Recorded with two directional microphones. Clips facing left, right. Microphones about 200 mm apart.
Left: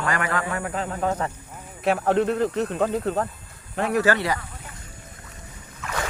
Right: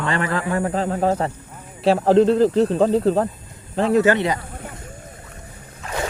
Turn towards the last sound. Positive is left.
turn(degrees=-30)  # may be behind; listen again after turning